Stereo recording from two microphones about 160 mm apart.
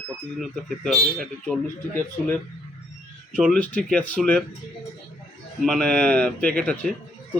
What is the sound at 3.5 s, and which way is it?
Speech, 10° left (ahead or behind).